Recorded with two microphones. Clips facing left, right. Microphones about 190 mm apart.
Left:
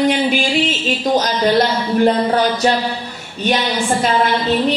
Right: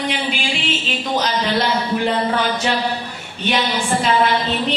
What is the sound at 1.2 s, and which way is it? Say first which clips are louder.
Speech: left 4 dB; 45° left (ahead or behind).